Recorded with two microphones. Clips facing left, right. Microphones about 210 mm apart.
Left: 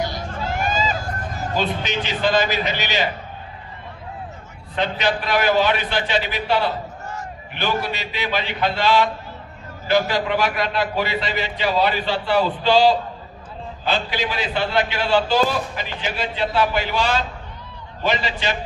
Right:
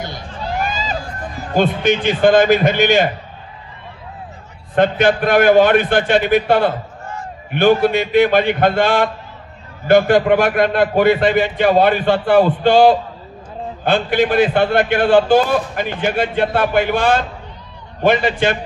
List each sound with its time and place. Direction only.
1.5 s a man's voice: 55° right (ahead or behind)
4.7 s a man's voice: 50° right (ahead or behind)